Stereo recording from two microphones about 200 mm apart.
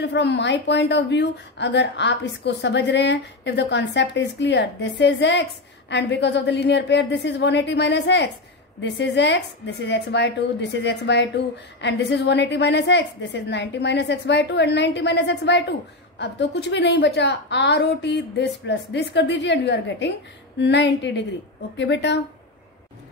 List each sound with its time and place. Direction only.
0.0 s a woman's voice: 60° left (ahead or behind)